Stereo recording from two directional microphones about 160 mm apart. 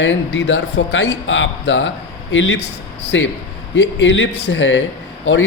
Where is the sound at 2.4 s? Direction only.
90° left.